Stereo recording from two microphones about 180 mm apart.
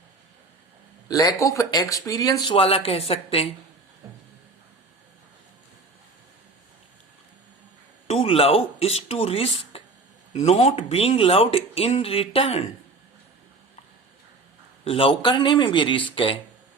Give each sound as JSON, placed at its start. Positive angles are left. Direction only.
{"t": 1.0, "sound": "speech", "side_deg": 20}
{"t": 8.0, "sound": "speech", "side_deg": 35}
{"t": 14.8, "sound": "speech", "side_deg": 30}